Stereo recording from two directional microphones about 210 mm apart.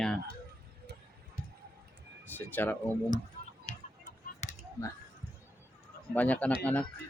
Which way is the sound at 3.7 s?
30° left (ahead or behind).